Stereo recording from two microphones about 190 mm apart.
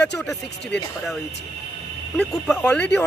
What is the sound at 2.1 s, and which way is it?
Speech, 5° left (ahead or behind).